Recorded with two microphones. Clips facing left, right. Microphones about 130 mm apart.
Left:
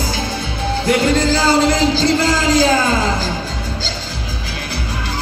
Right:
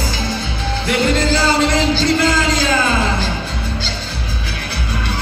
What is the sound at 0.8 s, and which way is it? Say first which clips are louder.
Music: left 2 dB; 40° left (ahead or behind).